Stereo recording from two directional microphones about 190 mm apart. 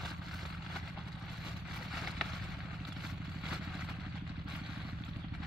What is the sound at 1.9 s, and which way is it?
Vehicle, centre (ahead or behind).